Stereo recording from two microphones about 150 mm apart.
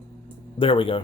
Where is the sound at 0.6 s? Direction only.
35° left (ahead or behind).